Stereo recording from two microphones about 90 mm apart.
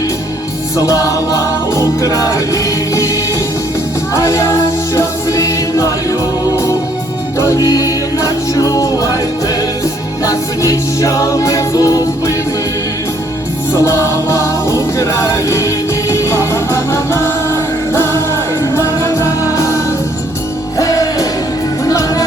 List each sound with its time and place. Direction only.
0.8 s music: 40° left (ahead or behind)
4.1 s music: 35° left (ahead or behind)
7.3 s music: 35° left (ahead or behind)
10.2 s music: 40° left (ahead or behind)
13.7 s music: 35° left (ahead or behind)